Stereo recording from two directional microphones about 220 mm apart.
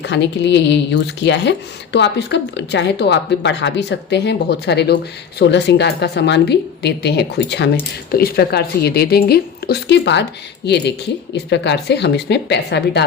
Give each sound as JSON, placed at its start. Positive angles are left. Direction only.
{"t": 0.0, "sound": "a woman's voice", "side_deg": 50}
{"t": 11.4, "sound": "a woman's voice", "side_deg": 50}